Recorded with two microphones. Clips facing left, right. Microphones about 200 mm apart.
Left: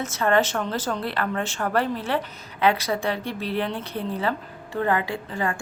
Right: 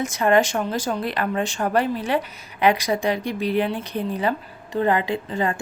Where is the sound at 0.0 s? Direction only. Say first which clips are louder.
Right 3 dB; 15° right (ahead or behind).